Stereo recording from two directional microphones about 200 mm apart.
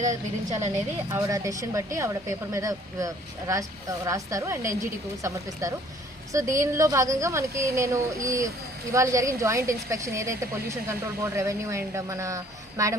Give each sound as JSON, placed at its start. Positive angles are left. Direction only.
{"t": 0.0, "sound": "a woman's voice", "side_deg": -35}
{"t": 1.1, "sound": "a woman's voice", "side_deg": -15}